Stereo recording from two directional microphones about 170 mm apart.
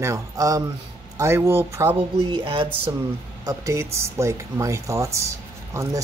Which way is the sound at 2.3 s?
30° right (ahead or behind).